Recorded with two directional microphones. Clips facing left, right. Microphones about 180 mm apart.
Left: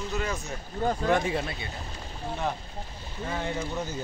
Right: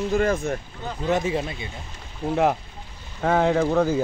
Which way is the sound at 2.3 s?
90° right.